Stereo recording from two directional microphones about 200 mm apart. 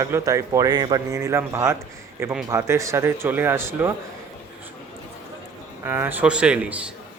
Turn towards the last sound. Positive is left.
turn(degrees=-5)  # may be behind; listen again after turning